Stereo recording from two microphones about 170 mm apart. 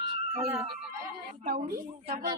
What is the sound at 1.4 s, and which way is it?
Speech, 55° right (ahead or behind).